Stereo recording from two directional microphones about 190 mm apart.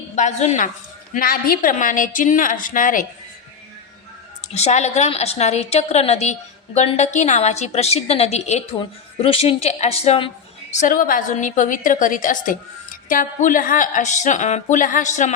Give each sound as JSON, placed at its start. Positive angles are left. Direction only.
{"t": 0.2, "sound": "a woman's voice", "side_deg": 35}
{"t": 1.1, "sound": "a woman's voice", "side_deg": 50}
{"t": 4.5, "sound": "a woman's voice", "side_deg": 35}
{"t": 10.8, "sound": "a woman's voice", "side_deg": 45}